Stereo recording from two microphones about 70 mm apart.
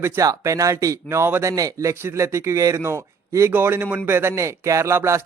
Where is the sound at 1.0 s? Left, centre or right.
Right.